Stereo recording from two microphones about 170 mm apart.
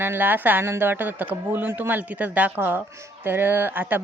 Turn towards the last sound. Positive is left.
turn(degrees=-10)  # may be behind; listen again after turning